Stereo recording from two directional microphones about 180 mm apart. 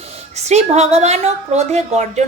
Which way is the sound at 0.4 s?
40° right (ahead or behind).